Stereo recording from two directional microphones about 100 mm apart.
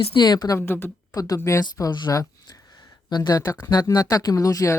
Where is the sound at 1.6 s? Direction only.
45° left (ahead or behind).